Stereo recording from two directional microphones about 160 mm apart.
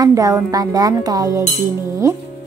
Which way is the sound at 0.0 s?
20° right (ahead or behind).